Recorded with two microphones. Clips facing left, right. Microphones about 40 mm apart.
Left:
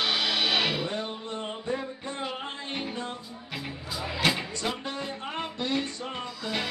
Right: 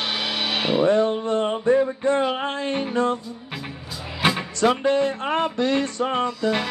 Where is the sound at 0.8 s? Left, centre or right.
Right.